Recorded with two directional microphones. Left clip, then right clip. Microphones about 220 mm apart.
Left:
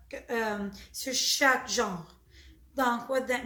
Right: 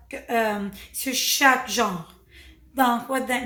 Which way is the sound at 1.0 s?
70° right (ahead or behind).